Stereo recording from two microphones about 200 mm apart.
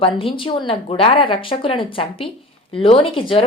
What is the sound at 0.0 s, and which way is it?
Speech, 25° left (ahead or behind).